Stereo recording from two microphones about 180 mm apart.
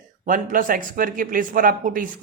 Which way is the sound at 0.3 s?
50° right (ahead or behind).